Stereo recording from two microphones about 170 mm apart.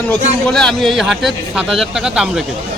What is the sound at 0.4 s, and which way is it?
A man's voice, 5° left (ahead or behind).